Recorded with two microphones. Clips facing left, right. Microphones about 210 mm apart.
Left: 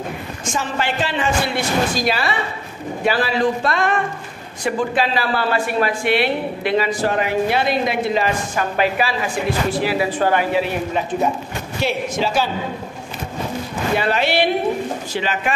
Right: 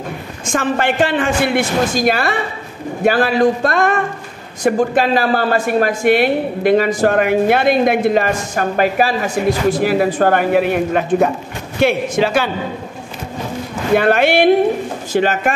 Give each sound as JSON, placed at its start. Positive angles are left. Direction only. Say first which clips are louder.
{"t": 0.5, "sound": "speech", "louder": "right 6 dB", "side_deg": -55}
{"t": 13.9, "sound": "speech", "louder": "right 7 dB", "side_deg": -55}